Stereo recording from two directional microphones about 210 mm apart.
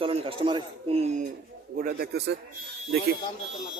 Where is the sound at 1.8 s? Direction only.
45° right (ahead or behind).